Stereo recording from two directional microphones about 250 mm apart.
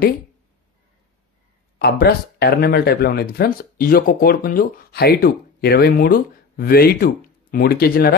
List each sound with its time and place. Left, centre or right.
1.8 s speech: left